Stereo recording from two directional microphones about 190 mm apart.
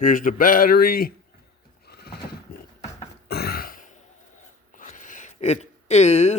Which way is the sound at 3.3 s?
55° left (ahead or behind).